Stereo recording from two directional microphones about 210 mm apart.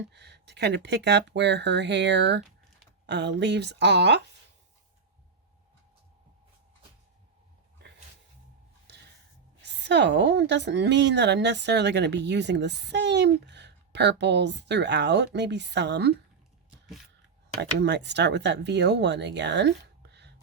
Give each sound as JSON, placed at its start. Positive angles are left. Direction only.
{"t": 0.1, "sound": "a woman's voice", "side_deg": -55}
{"t": 9.6, "sound": "a woman's voice", "side_deg": -55}
{"t": 17.6, "sound": "a woman's voice", "side_deg": -55}